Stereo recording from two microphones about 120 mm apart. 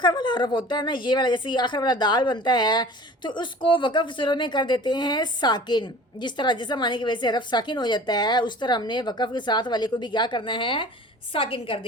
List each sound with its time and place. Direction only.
0.0 s a woman's voice: 40° left (ahead or behind)